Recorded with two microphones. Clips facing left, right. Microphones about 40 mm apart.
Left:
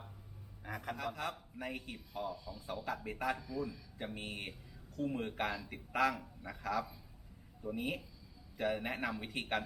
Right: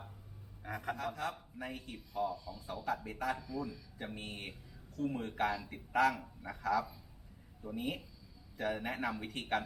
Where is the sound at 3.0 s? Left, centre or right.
Left.